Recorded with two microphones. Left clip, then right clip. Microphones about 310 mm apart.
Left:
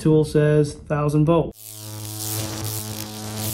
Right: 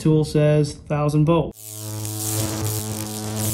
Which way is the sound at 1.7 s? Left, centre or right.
Left.